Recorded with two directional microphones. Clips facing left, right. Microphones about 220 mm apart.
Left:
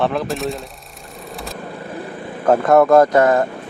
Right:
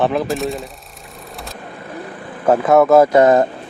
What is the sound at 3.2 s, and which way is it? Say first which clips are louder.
Speech: right 3 dB; 20° right (ahead or behind).